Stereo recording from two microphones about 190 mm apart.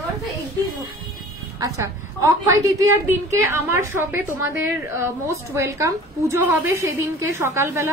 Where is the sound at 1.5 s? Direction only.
15° right (ahead or behind).